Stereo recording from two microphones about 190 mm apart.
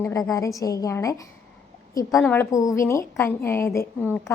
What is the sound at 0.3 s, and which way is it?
A woman's voice, 15° left (ahead or behind).